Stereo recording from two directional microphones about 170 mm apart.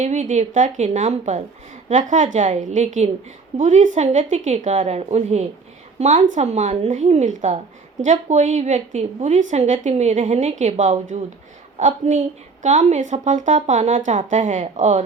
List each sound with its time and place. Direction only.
0.0 s a woman's voice: 45° right (ahead or behind)